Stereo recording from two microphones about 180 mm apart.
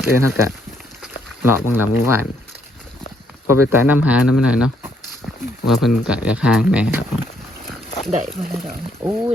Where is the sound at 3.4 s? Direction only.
15° right (ahead or behind).